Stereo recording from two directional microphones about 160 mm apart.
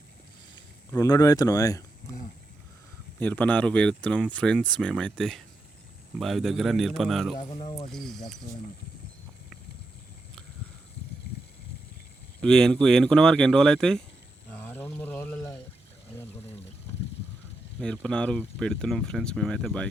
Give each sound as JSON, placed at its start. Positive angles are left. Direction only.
{"t": 0.9, "sound": "speech", "side_deg": 20}
{"t": 3.2, "sound": "speech", "side_deg": 10}
{"t": 7.5, "sound": "speech", "side_deg": 35}
{"t": 7.9, "sound": "speech", "side_deg": 0}
{"t": 12.4, "sound": "speech", "side_deg": 5}
{"t": 14.5, "sound": "a sound", "side_deg": 10}
{"t": 18.0, "sound": "speech", "side_deg": 5}